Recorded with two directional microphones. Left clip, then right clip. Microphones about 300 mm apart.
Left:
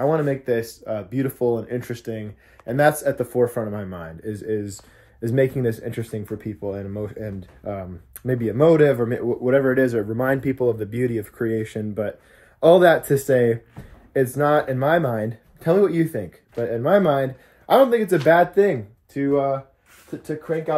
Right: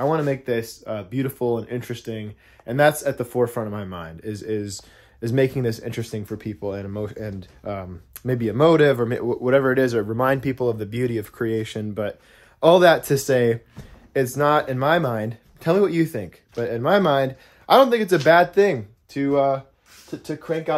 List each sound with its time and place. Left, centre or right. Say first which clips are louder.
0.0 s speech: left 1 dB; centre
19.2 s speech: right 1 dB; centre